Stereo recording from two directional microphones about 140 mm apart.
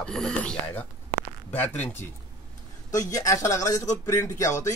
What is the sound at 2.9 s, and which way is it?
Speech, 25° left (ahead or behind).